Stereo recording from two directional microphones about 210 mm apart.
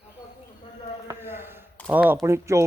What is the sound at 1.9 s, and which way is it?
Speech, 10° right (ahead or behind).